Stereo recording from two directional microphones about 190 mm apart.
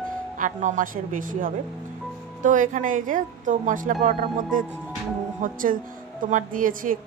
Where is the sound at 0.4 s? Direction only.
40° right (ahead or behind).